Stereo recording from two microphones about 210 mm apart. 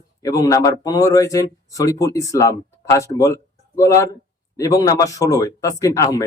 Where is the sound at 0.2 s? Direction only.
15° left (ahead or behind).